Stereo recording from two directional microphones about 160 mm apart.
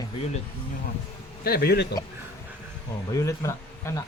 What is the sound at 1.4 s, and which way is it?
Speech, 80° left.